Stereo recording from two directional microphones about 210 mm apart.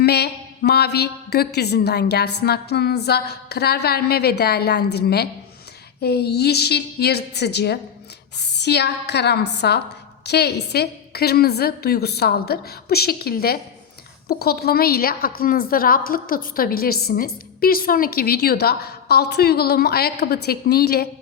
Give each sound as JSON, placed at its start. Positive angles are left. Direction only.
{"t": 0.0, "sound": "a woman's voice", "side_deg": 50}